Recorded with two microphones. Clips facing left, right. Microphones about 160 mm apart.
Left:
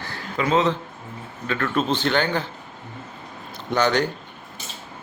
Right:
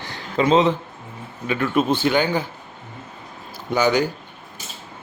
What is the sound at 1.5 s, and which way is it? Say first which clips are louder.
Speech: right 3 dB; 10° right (ahead or behind).